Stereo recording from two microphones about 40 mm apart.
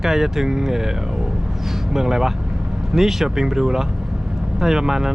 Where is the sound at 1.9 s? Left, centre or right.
Centre.